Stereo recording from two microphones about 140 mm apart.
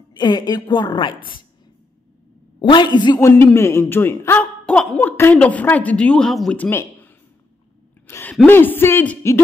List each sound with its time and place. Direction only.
0.1 s a woman's voice: 30° left (ahead or behind)
2.7 s a woman's voice: 35° left (ahead or behind)
3.2 s a man's voice: 15° left (ahead or behind)
8.1 s a man's voice: 15° left (ahead or behind)